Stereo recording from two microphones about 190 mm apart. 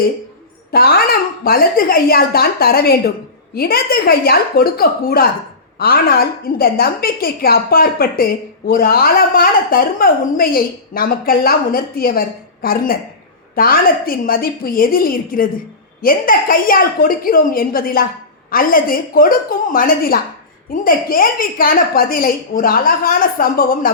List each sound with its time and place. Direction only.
0.7 s a woman's voice: 55° left (ahead or behind)